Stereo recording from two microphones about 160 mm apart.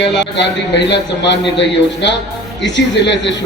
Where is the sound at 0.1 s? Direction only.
90° left.